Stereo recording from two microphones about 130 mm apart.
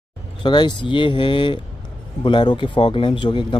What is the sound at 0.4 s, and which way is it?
Speech, 35° left (ahead or behind).